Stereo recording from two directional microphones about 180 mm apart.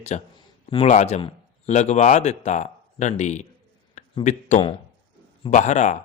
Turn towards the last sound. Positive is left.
turn(degrees=40)  # may be behind; listen again after turning